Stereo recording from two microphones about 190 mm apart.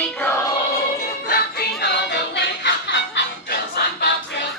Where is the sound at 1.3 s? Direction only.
65° left (ahead or behind).